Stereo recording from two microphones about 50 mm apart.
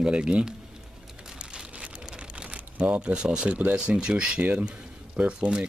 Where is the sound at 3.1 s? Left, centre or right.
Centre.